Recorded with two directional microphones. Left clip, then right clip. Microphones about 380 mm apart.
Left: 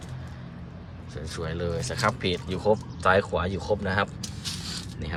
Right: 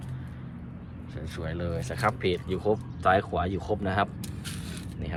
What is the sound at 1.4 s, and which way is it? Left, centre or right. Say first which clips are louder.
Speech: left 3 dB; centre.